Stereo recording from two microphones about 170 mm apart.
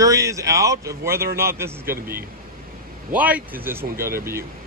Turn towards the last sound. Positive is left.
turn(degrees=-15)  # may be behind; listen again after turning